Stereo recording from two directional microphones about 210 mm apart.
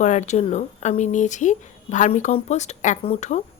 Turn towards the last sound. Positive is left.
turn(degrees=30)  # may be behind; listen again after turning